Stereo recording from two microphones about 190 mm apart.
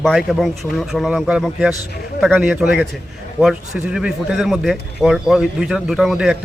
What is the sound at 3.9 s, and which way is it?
A man's voice, 5° right (ahead or behind).